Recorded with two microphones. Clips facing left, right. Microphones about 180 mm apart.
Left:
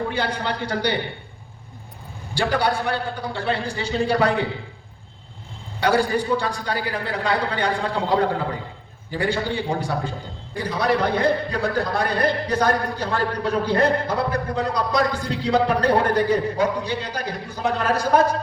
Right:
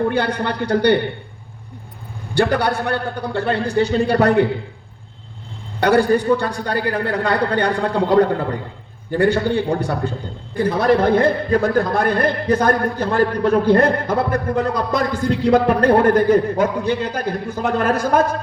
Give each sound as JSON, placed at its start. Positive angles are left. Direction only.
{"t": 0.1, "sound": "a man's voice", "side_deg": -60}
{"t": 2.3, "sound": "a man's voice", "side_deg": -60}
{"t": 5.8, "sound": "a man's voice", "side_deg": -60}